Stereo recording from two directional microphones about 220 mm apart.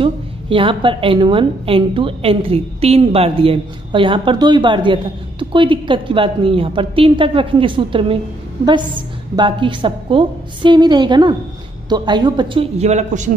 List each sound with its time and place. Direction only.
0.0 s a woman's voice: 25° right (ahead or behind)
9.3 s a woman's voice: 20° right (ahead or behind)